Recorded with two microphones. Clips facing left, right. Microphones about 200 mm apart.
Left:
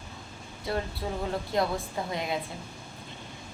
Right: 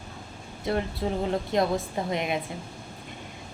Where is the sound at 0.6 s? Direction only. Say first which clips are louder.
Right 4 dB; 20° right (ahead or behind).